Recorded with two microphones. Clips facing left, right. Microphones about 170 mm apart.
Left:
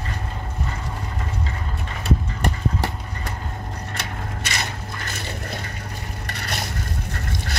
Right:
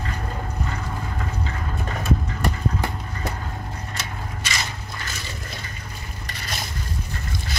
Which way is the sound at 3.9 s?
60° left (ahead or behind).